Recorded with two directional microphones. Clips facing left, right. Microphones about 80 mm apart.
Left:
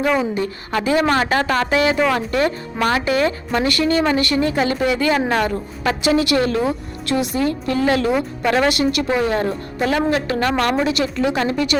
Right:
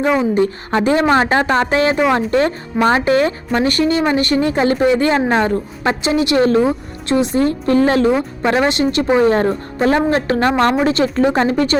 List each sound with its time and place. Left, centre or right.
0.3 s a woman's voice: right
8.1 s a woman's voice: right